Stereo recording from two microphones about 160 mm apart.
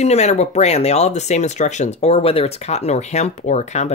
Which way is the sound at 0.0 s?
45° left (ahead or behind).